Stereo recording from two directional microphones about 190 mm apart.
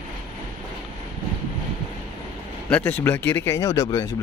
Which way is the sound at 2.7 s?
10° left (ahead or behind).